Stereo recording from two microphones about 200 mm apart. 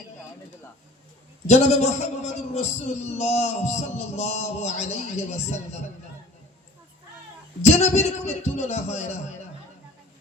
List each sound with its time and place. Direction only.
1.5 s a man's voice: 35° left (ahead or behind)
7.6 s a man's voice: 35° left (ahead or behind)